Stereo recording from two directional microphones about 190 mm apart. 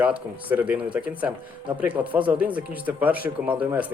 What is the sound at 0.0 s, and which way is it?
Speech, 10° right (ahead or behind).